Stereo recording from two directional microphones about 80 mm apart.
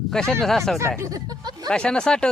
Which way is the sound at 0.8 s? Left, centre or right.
Right.